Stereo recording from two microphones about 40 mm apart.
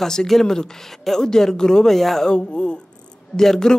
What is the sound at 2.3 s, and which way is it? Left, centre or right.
Speech, left.